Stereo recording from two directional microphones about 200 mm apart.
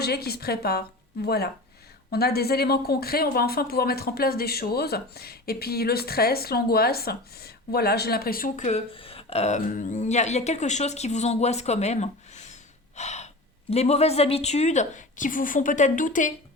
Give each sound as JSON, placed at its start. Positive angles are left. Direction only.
{"t": 0.0, "sound": "a woman's voice", "side_deg": 50}